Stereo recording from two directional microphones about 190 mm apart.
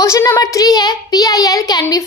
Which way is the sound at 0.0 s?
15° left (ahead or behind).